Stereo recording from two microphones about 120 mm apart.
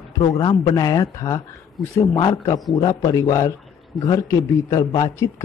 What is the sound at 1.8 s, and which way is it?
Speech, centre (ahead or behind).